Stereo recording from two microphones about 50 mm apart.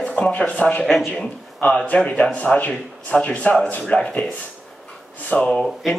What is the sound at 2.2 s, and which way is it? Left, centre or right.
Speech, left.